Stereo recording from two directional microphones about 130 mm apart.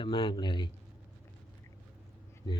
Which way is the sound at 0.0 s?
40° left (ahead or behind).